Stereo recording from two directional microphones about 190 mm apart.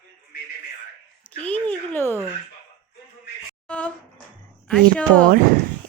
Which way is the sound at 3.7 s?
5° left (ahead or behind).